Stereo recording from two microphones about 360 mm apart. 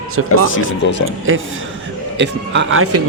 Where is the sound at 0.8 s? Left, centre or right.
Left.